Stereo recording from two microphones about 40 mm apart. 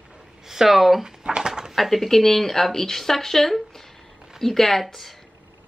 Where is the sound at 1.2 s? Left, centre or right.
Right.